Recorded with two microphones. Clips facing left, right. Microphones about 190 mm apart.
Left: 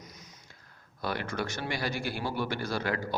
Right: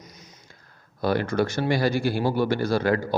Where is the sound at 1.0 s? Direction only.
35° right (ahead or behind).